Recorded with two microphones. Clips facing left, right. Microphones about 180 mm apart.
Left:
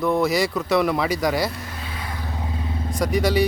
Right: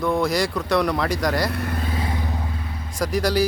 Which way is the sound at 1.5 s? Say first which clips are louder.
Right 7 dB; 60° right (ahead or behind).